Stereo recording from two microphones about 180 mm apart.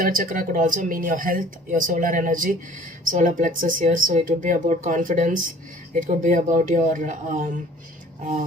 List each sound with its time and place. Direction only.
0.0 s speech: 50° right (ahead or behind)